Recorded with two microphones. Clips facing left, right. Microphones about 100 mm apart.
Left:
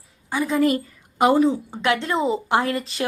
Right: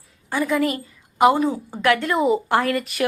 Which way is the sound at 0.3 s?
15° left (ahead or behind).